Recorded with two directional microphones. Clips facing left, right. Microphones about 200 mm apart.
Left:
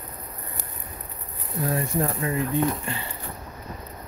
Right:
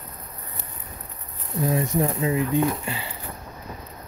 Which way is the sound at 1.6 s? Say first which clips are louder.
Right 3 dB; 15° right (ahead or behind).